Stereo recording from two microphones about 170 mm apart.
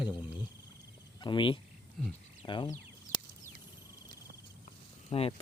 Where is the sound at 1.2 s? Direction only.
30° left (ahead or behind).